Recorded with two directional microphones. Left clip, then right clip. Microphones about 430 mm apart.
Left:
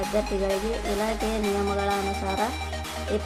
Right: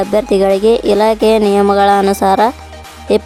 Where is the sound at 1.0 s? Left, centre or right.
Right.